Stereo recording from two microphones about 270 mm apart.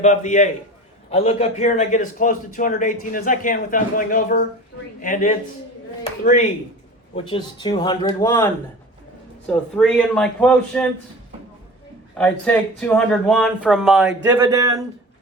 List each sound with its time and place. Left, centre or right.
0.0 s a man's voice: left
7.3 s speech: centre
9.5 s speech: centre
12.1 s speech: centre